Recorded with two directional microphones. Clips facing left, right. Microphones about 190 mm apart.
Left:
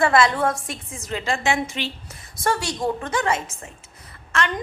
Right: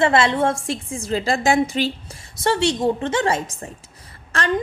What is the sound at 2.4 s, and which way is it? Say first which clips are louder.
A woman's voice: right 5 dB; 25° right (ahead or behind).